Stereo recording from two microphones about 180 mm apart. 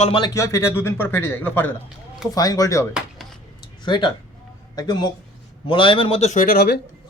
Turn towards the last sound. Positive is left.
turn(degrees=60)  # may be behind; listen again after turning